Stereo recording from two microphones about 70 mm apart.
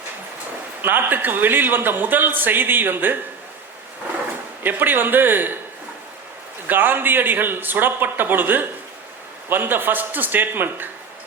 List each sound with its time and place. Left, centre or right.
0.8 s a man's voice: right
4.6 s a man's voice: right
6.7 s a man's voice: right